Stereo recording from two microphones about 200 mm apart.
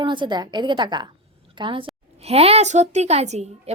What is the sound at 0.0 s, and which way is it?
A woman's voice, 25° right (ahead or behind).